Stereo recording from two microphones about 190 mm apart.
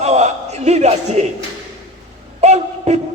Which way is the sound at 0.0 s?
35° right (ahead or behind).